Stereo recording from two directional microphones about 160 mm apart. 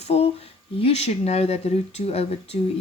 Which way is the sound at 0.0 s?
40° left (ahead or behind).